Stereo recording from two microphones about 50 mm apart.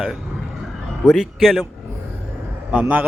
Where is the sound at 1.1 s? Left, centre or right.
Centre.